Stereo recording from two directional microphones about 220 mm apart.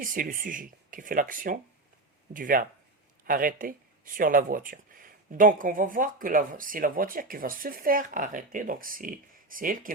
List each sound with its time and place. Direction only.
0.0 s speech: 40° right (ahead or behind)